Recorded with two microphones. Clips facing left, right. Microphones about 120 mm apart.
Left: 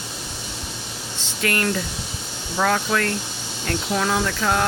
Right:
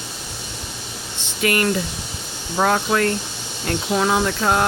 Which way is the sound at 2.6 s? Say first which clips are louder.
Right 3 dB; 25° right (ahead or behind).